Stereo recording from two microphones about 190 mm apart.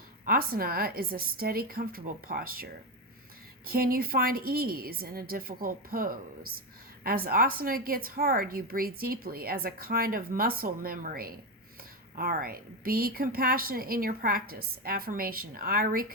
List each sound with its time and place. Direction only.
0.3 s a woman's voice: 50° right (ahead or behind)
3.7 s a woman's voice: 50° right (ahead or behind)